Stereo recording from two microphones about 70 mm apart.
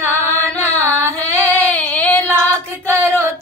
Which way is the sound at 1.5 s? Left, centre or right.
Left.